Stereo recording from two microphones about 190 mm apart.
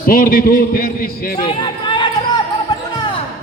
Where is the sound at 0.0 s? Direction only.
50° left (ahead or behind).